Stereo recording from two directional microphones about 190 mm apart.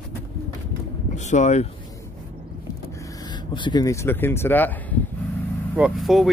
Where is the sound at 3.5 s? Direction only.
25° left (ahead or behind).